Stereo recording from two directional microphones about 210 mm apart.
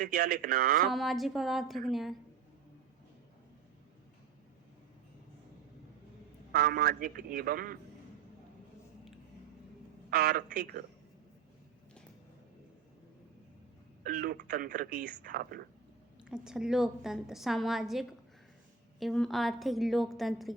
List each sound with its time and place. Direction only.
0.0 s a man's voice: 45° right (ahead or behind)
0.9 s a woman's voice: centre (ahead or behind)
6.5 s a man's voice: 45° right (ahead or behind)
10.1 s a man's voice: 45° right (ahead or behind)
14.0 s a man's voice: 45° right (ahead or behind)
16.3 s a woman's voice: 5° right (ahead or behind)